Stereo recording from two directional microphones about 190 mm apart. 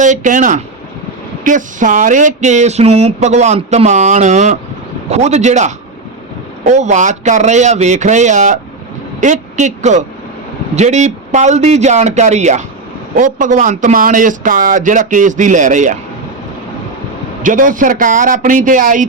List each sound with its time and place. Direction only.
0.0 s a man's voice: 40° right (ahead or behind)
17.4 s a man's voice: 45° right (ahead or behind)